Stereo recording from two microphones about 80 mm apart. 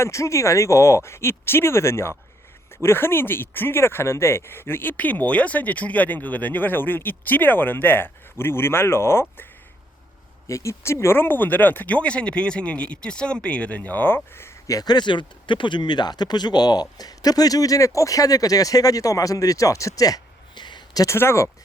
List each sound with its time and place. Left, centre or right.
0.0 s speech: left
10.5 s speech: left
14.7 s speech: left
20.6 s a sound: left
21.2 s speech: left